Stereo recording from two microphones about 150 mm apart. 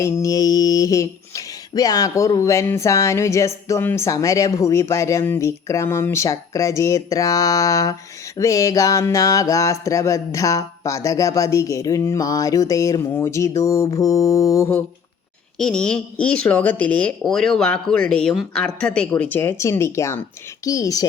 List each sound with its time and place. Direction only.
0.0 s speech: 20° left (ahead or behind)
15.5 s a woman's voice: 5° left (ahead or behind); by 21.1 s 25° left (ahead or behind)